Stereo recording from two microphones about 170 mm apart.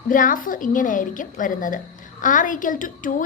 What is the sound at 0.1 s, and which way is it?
A woman's voice, 55° left (ahead or behind).